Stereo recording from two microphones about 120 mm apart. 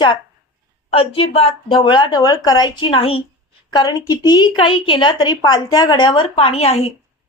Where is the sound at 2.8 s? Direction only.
50° left (ahead or behind).